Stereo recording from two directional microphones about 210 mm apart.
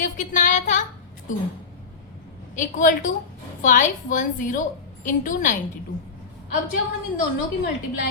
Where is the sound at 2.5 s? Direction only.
35° left (ahead or behind).